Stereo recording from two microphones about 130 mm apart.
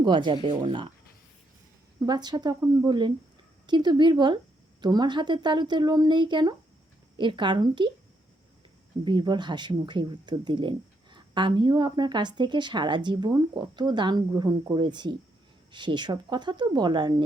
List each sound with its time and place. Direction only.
0.0 s speech: 35° right (ahead or behind)
2.0 s speech: 35° right (ahead or behind)
9.0 s speech: 35° right (ahead or behind)